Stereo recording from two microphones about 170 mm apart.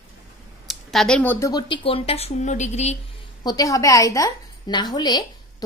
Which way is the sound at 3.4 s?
20° left (ahead or behind).